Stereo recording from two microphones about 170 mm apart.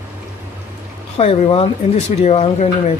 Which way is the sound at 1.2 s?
35° left (ahead or behind).